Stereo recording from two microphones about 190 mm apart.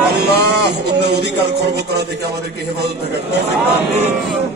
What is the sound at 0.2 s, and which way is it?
A man's voice, 60° right (ahead or behind).